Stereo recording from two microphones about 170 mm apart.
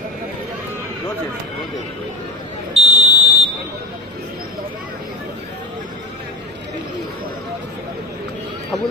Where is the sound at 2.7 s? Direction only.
40° right (ahead or behind).